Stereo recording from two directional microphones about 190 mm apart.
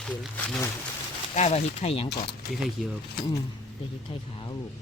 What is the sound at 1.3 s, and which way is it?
Speech, 35° left (ahead or behind).